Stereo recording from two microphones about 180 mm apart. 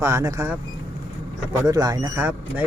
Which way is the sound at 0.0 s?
15° right (ahead or behind).